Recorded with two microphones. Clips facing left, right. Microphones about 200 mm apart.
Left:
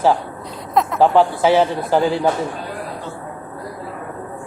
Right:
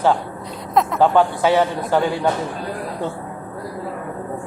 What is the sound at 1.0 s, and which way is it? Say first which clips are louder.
Speech: left 3 dB; 20° left (ahead or behind).